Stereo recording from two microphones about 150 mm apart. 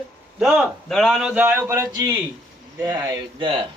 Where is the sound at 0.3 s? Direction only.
Centre (ahead or behind); by 3.7 s 30° right (ahead or behind).